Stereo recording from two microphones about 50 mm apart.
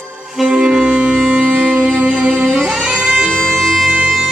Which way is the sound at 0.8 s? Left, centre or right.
Centre.